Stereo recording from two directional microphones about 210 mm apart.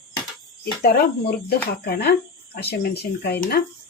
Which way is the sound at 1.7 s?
45° left (ahead or behind).